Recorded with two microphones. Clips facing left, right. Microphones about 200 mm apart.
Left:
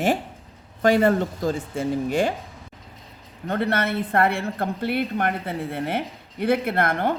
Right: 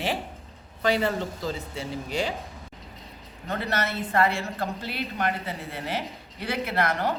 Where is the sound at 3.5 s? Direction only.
55° left (ahead or behind).